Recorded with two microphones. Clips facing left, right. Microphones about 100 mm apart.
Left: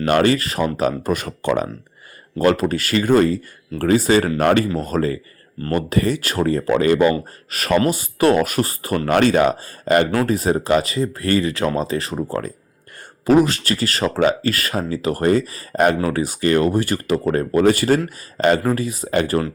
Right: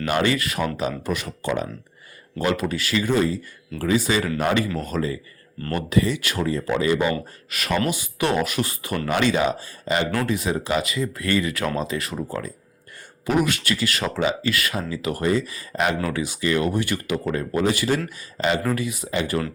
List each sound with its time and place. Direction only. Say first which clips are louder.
0.1 s speech: left 6 dB; 40° left (ahead or behind)
0.9 s speech: left 6 dB; 50° left (ahead or behind)
2.4 s speech: left 6 dB; 45° left (ahead or behind)
7.1 s speech: left 5 dB; 40° left (ahead or behind)
12.3 s speech: left 5 dB; 50° left (ahead or behind)
13.2 s speech: left 7 dB; 35° left (ahead or behind)
18.7 s speech: left 4 dB; 35° left (ahead or behind)
19.1 s speech: left 6 dB; 50° left (ahead or behind)